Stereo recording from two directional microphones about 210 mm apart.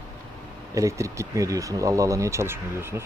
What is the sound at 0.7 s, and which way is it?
Speech, 15° right (ahead or behind).